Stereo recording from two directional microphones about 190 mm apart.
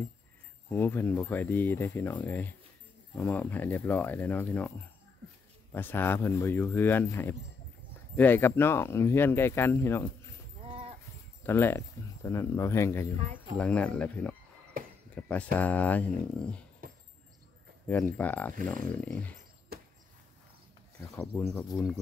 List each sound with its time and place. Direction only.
0.7 s speech: 10° left (ahead or behind)
11.4 s speech: 10° left (ahead or behind)
17.8 s speech: 10° left (ahead or behind)
19.7 s a sound: 55° right (ahead or behind)
21.2 s speech: 5° left (ahead or behind)